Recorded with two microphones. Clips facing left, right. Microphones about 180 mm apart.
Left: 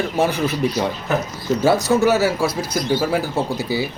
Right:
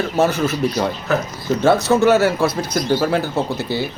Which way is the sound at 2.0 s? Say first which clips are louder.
Right 2 dB; 5° left (ahead or behind).